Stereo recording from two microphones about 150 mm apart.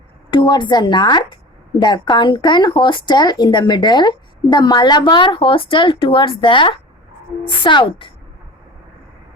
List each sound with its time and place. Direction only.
0.3 s speech: 30° left (ahead or behind)